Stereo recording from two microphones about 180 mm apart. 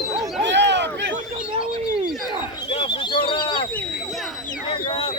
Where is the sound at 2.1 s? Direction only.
Centre (ahead or behind).